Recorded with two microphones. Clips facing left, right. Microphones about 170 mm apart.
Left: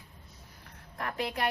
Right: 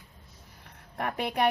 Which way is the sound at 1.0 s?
60° right (ahead or behind).